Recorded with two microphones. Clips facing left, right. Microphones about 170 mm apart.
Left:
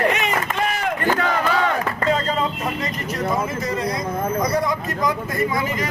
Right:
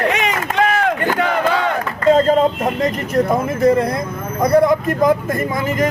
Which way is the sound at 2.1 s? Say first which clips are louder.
Right 12 dB; 50° right (ahead or behind).